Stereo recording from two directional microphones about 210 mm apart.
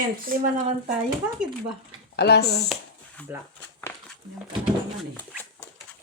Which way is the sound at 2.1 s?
50° left (ahead or behind).